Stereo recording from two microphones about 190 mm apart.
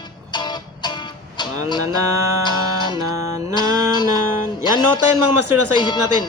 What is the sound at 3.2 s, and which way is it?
Music, 15° right (ahead or behind).